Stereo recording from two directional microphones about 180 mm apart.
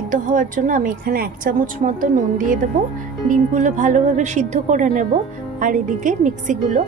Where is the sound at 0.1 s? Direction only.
45° right (ahead or behind).